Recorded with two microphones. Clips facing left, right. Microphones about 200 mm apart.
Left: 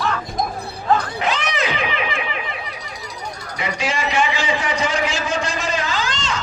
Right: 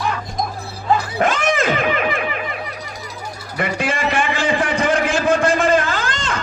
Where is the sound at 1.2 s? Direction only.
50° right (ahead or behind).